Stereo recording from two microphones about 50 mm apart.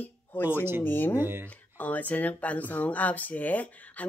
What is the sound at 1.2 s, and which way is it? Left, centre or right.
Speech, right.